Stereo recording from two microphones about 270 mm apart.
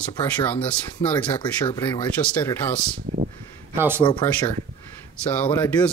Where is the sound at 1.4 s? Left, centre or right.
Centre.